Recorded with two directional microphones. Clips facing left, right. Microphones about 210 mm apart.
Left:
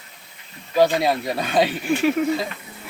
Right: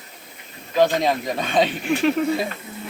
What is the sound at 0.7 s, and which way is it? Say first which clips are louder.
Speech: left 1 dB; 10° left (ahead or behind).